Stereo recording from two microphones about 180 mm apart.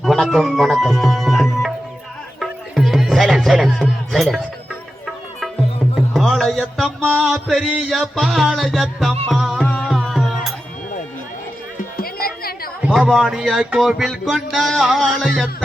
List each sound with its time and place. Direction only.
0.0 s tabla: centre (ahead or behind)
2.4 s music: centre (ahead or behind)
6.1 s music: centre (ahead or behind)
11.9 s music: 55° left (ahead or behind)
12.8 s music: centre (ahead or behind)